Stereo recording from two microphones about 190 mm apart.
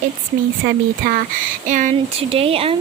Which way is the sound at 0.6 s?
50° right (ahead or behind).